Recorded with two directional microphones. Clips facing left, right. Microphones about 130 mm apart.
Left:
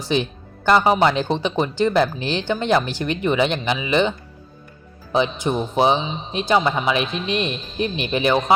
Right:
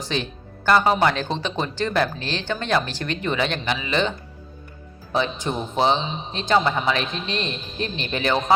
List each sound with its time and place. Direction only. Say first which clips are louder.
0.1 s speech: left 7 dB; 15° left (ahead or behind)
5.1 s speech: left 4 dB; 15° left (ahead or behind)